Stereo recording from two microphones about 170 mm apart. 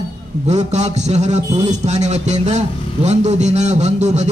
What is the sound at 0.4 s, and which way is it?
A man's voice, 40° right (ahead or behind).